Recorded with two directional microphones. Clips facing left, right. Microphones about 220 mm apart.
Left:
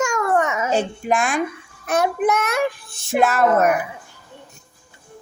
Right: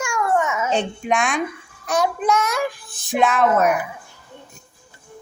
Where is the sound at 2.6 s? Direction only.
25° left (ahead or behind).